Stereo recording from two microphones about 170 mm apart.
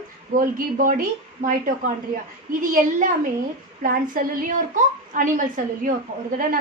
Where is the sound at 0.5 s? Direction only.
55° right (ahead or behind).